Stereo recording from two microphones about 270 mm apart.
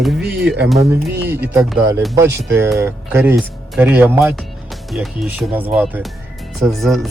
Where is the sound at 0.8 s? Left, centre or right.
Centre.